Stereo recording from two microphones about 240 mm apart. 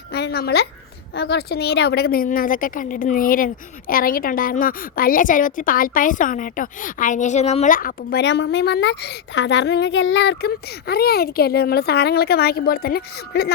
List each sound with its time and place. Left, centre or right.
0.1 s a woman's voice: left